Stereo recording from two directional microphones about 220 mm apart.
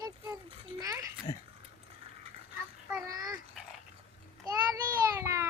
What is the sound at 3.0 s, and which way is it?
Dog, 15° right (ahead or behind).